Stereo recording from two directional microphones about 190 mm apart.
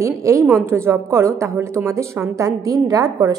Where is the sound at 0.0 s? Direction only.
15° right (ahead or behind).